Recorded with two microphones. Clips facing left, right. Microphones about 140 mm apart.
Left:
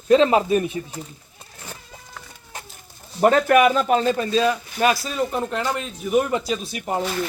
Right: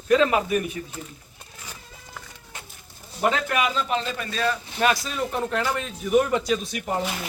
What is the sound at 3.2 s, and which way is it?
Speech, 50° left (ahead or behind).